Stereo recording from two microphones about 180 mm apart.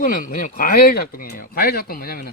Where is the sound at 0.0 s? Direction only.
50° left (ahead or behind).